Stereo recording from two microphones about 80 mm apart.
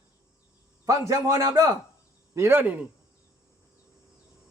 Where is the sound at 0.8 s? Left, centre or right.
Right.